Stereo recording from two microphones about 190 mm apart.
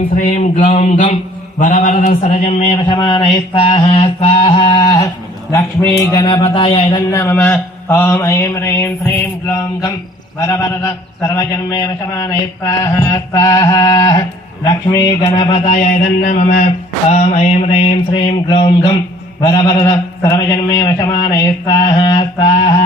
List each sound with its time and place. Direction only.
0.2 s speech: 40° left (ahead or behind)
6.1 s mantra: 25° left (ahead or behind)
7.1 s mantra: 15° left (ahead or behind); by 16.6 s 40° left (ahead or behind)
17.1 s speech: 35° left (ahead or behind)
19.4 s mantra: 20° left (ahead or behind)